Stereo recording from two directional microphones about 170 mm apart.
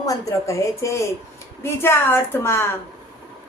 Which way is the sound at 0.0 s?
20° left (ahead or behind).